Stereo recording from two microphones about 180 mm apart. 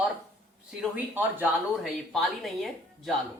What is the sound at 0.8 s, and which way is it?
Speech, 10° right (ahead or behind).